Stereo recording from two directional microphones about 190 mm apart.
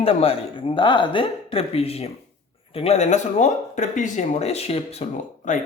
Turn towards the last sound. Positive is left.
turn(degrees=40)  # may be behind; listen again after turning